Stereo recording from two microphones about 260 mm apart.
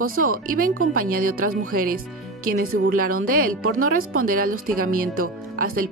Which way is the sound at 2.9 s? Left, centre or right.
Right.